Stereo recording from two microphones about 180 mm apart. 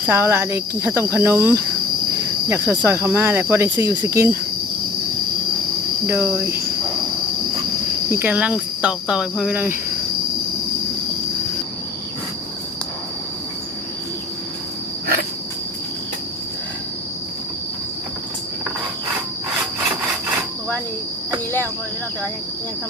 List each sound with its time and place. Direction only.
0.0 s cricket: 10° right (ahead or behind)
6.1 s cricket: 10° right (ahead or behind)
8.1 s cricket: 10° right (ahead or behind)